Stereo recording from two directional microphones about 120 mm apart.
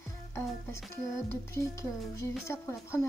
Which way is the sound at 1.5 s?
20° left (ahead or behind).